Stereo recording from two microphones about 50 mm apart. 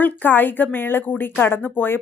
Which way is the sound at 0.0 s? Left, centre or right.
Left.